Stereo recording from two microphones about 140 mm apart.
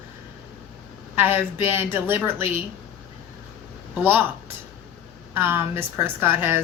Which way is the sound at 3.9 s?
15° right (ahead or behind).